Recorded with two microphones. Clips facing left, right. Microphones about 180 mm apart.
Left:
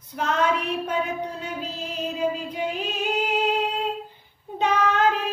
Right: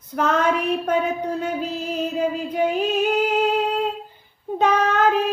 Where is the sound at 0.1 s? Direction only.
50° right (ahead or behind).